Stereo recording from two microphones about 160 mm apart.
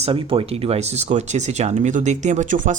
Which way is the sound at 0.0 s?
35° right (ahead or behind).